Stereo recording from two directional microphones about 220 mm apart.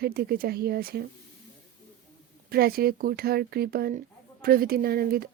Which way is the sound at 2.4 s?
45° right (ahead or behind).